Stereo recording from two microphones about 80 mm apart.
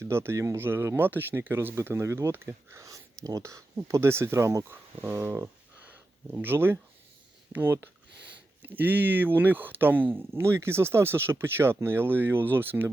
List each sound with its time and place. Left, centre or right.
0.0 s speech: right